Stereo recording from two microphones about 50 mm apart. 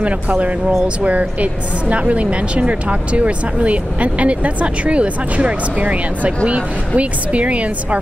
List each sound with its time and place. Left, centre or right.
0.0 s a woman's voice: right